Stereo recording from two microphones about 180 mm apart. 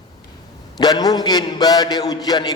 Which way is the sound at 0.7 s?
20° left (ahead or behind).